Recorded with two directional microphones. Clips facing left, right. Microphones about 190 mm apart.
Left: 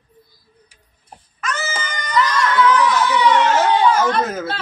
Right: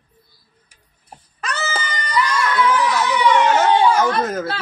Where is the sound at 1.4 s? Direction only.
35° right (ahead or behind).